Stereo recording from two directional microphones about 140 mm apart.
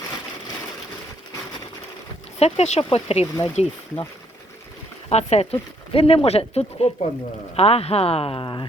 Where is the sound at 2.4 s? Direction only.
50° left (ahead or behind).